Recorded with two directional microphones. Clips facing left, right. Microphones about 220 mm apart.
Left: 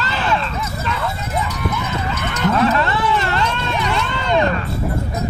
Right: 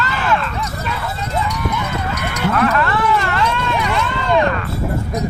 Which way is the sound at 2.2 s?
10° right (ahead or behind).